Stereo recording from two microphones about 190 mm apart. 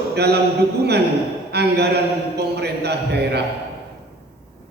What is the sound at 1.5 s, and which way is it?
A man's voice, 60° right (ahead or behind).